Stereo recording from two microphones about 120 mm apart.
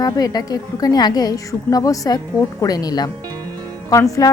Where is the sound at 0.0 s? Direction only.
30° left (ahead or behind).